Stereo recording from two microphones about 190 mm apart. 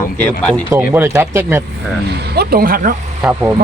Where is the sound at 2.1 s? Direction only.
55° right (ahead or behind).